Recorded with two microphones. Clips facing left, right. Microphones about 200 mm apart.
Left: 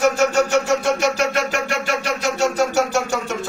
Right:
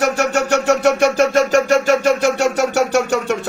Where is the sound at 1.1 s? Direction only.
45° right (ahead or behind).